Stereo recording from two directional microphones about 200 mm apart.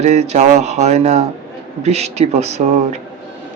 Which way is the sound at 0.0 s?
35° right (ahead or behind).